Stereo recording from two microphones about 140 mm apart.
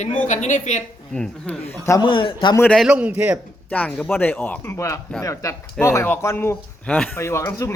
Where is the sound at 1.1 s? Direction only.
5° left (ahead or behind).